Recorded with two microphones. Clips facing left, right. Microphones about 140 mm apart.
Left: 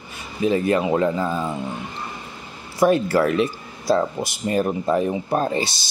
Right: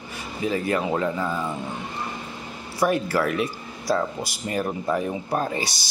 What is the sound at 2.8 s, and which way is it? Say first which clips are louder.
Speech: left 5 dB; 25° left (ahead or behind).